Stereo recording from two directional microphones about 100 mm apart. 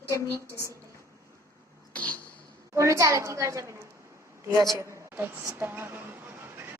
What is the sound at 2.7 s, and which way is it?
A woman's voice, 30° right (ahead or behind).